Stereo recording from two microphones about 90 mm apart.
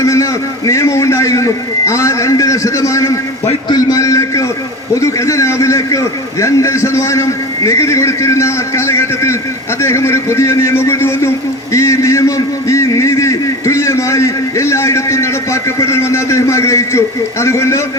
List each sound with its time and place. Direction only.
0.0 s a man's voice: 35° left (ahead or behind)
3.7 s a sound: 45° left (ahead or behind)
4.9 s a man's voice: 35° left (ahead or behind)